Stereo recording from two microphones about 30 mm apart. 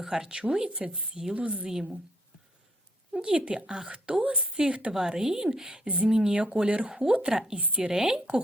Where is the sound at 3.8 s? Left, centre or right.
Right.